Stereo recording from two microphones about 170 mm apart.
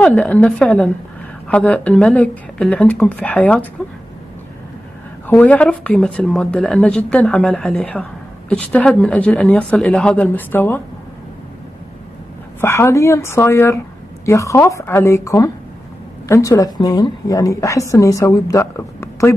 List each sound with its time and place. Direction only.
0.0 s speech: 10° left (ahead or behind)
5.2 s speech: 10° left (ahead or behind)
12.5 s a woman's voice: 15° left (ahead or behind)